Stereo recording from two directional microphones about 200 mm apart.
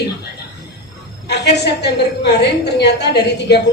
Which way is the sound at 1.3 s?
55° left (ahead or behind).